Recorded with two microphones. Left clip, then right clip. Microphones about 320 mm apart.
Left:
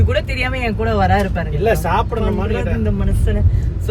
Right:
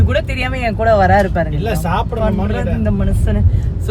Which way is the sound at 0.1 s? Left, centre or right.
Centre.